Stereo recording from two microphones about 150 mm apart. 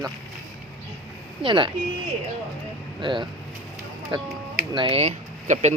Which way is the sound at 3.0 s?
35° right (ahead or behind).